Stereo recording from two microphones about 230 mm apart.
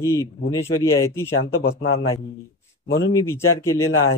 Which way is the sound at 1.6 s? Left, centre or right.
Left.